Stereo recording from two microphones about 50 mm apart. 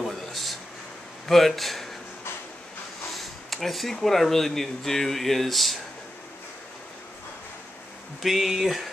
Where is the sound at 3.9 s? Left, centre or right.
Centre.